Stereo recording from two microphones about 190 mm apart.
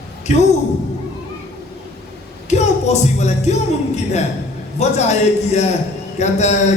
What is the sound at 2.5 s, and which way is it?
Speech, 35° left (ahead or behind).